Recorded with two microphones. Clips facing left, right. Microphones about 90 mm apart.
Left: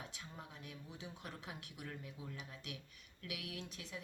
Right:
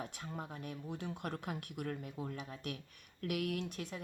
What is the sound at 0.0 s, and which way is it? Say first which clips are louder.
Speech: right 8 dB; 50° right (ahead or behind).